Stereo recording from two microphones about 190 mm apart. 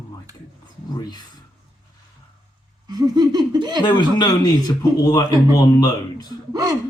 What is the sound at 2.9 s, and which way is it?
Gasp, 20° right (ahead or behind).